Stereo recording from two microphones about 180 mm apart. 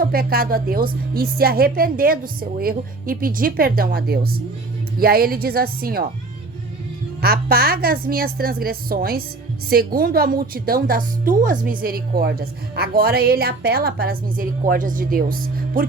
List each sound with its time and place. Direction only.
0.0 s a woman's voice: 55° right (ahead or behind)
7.2 s a woman's voice: 60° right (ahead or behind)